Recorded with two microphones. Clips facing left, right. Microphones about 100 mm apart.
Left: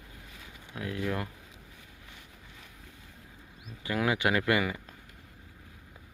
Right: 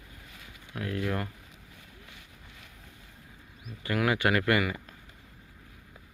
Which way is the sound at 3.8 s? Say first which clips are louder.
Right 1 dB; 15° left (ahead or behind).